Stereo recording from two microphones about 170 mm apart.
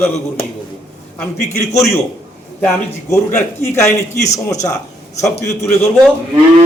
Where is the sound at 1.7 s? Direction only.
20° left (ahead or behind).